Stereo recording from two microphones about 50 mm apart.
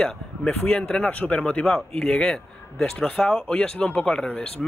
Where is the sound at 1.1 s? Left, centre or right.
Left.